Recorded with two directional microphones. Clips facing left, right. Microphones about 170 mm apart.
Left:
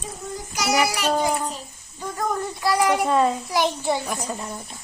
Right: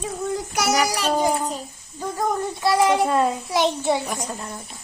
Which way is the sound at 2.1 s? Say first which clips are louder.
Right 2 dB; 25° right (ahead or behind).